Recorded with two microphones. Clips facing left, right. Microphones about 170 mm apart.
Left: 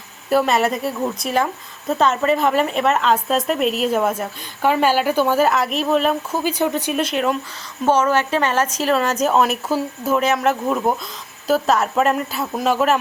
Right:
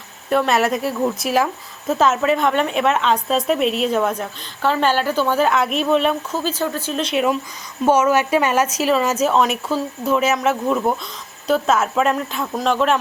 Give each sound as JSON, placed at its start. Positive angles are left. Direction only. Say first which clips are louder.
{"t": 0.3, "sound": "a woman's voice", "louder": "even", "side_deg": 0}
{"t": 6.4, "sound": "speech", "louder": "left 3 dB", "side_deg": 15}
{"t": 7.0, "sound": "a woman's voice", "louder": "right 4 dB", "side_deg": 0}